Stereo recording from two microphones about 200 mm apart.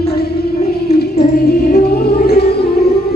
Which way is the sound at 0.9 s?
50° left (ahead or behind).